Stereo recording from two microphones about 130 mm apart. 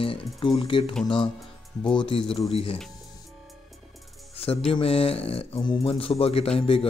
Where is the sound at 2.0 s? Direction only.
45° left (ahead or behind).